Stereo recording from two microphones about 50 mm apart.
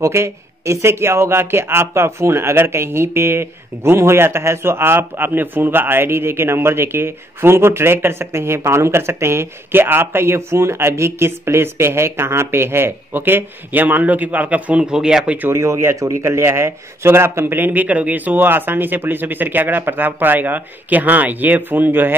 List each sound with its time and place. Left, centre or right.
0.0 s a man's voice: right
13.2 s speech: right
15.0 s speech: centre
15.5 s a man's voice: right
17.6 s speech: right
17.8 s speech: right